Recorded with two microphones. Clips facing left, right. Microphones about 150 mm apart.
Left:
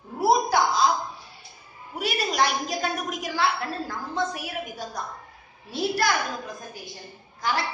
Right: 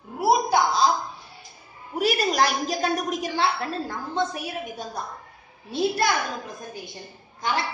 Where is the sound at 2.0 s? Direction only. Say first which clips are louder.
Right 5 dB; 45° right (ahead or behind).